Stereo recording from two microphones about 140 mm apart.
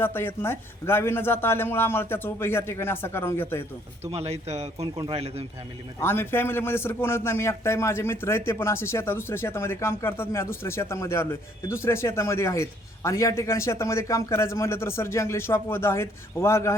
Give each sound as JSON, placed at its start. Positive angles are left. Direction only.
{"t": 0.0, "sound": "speech", "side_deg": 15}
{"t": 4.1, "sound": "speech", "side_deg": -50}
{"t": 4.8, "sound": "a man's voice", "side_deg": -25}
{"t": 5.1, "sound": "speech", "side_deg": -45}
{"t": 6.0, "sound": "a man's voice", "side_deg": 15}